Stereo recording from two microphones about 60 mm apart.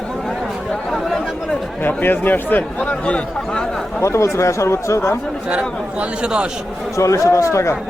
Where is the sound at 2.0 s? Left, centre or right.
Left.